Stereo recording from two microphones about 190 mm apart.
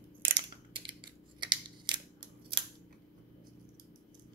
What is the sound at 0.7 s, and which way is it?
Mechanisms, 25° right (ahead or behind).